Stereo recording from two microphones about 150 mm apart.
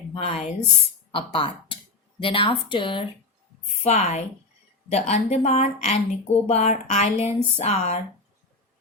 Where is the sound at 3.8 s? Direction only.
45° left (ahead or behind).